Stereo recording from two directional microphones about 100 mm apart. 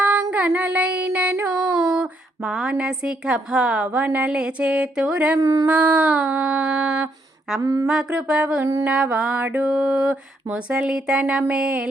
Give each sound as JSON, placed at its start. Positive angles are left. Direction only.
{"t": 0.0, "sound": "female singing", "side_deg": -15}
{"t": 5.4, "sound": "speech", "side_deg": -35}
{"t": 5.6, "sound": "mantra", "side_deg": -15}
{"t": 7.6, "sound": "speech", "side_deg": -35}
{"t": 7.9, "sound": "mantra", "side_deg": -10}